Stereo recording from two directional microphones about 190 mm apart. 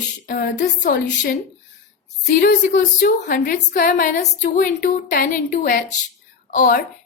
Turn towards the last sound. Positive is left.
turn(degrees=45)  # may be behind; listen again after turning